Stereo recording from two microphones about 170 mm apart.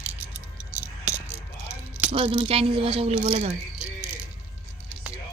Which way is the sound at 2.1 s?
35° right (ahead or behind).